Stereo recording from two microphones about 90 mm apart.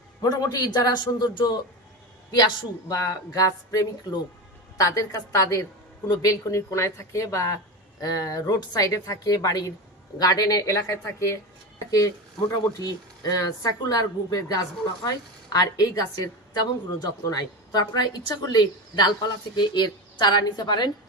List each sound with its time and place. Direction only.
0.2 s a woman's voice: 45° left (ahead or behind)
2.9 s a woman's voice: 45° left (ahead or behind)
13.2 s a woman's voice: 45° left (ahead or behind)